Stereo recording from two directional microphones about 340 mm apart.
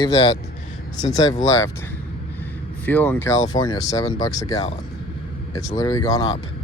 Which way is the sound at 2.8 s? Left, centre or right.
Centre.